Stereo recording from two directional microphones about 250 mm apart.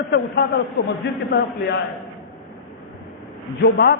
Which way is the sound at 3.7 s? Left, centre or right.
Left.